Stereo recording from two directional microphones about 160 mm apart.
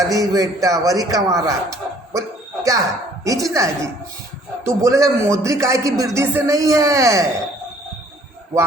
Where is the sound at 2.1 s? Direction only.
20° right (ahead or behind).